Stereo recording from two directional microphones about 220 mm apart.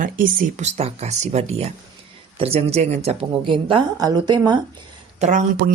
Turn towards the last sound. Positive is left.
turn(degrees=-40)  # may be behind; listen again after turning